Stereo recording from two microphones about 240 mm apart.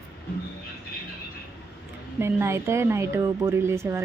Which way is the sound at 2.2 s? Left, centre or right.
Centre.